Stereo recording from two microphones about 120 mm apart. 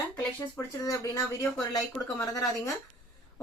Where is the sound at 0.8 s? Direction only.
25° left (ahead or behind).